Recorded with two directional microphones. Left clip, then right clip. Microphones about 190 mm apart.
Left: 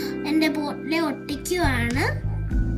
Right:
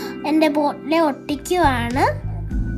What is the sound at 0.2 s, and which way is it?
A child's voice, 30° right (ahead or behind).